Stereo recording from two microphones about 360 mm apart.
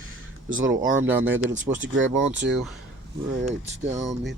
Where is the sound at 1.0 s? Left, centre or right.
Centre.